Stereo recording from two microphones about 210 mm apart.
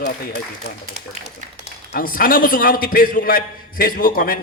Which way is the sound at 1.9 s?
45° left (ahead or behind).